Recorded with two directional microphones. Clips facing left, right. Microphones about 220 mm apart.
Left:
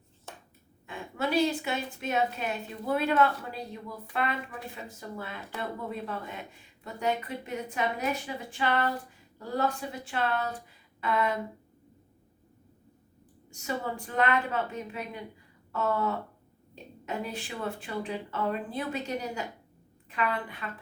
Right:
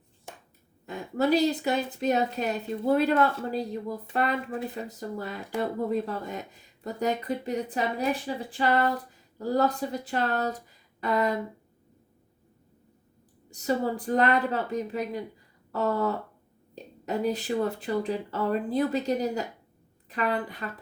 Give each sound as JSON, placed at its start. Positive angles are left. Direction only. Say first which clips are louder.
{"t": 0.9, "sound": "speech", "louder": "right 7 dB", "side_deg": -40}
{"t": 13.5, "sound": "a woman's voice", "louder": "right 7 dB", "side_deg": -35}